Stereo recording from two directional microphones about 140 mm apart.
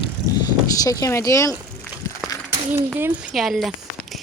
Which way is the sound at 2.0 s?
20° left (ahead or behind).